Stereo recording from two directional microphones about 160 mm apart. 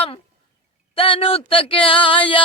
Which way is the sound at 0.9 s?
35° left (ahead or behind).